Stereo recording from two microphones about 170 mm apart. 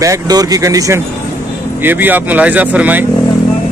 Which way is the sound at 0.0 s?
20° right (ahead or behind).